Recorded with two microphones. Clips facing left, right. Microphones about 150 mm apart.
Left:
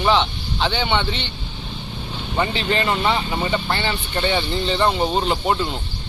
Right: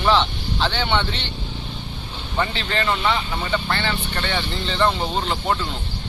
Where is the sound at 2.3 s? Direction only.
15° left (ahead or behind).